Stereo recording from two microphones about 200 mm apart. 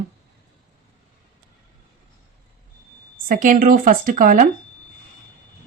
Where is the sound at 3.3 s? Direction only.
40° right (ahead or behind).